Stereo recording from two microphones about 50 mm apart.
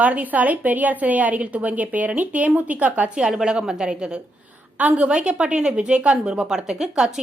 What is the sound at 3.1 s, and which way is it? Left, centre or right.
A woman's voice, centre.